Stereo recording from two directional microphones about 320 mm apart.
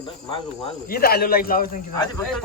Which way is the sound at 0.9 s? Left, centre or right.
Left.